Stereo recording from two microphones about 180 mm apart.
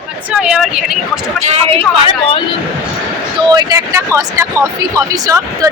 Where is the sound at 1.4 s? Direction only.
35° right (ahead or behind).